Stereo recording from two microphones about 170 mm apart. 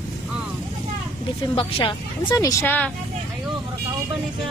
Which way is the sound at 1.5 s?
30° left (ahead or behind).